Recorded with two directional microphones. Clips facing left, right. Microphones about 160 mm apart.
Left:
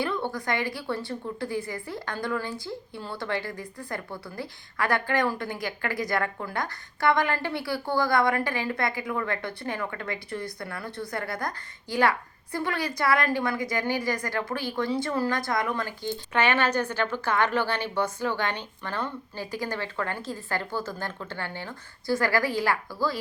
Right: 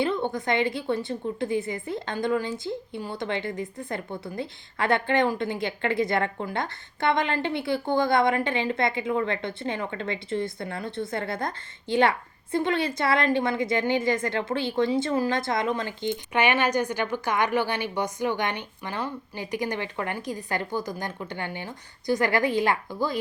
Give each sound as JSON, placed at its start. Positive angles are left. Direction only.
{"t": 0.0, "sound": "a woman's voice", "side_deg": -20}